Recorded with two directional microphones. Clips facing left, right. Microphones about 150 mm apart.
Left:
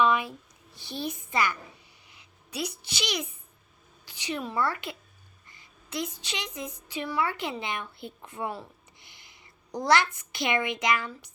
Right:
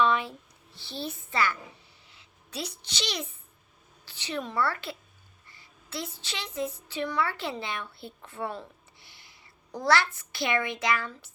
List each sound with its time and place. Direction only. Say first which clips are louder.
0.0 s a child's voice: left 1 dB; 15° left (ahead or behind)